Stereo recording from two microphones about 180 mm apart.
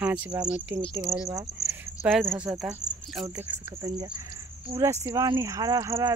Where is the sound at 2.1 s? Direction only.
Centre (ahead or behind).